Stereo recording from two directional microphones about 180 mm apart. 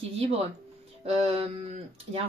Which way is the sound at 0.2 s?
35° right (ahead or behind).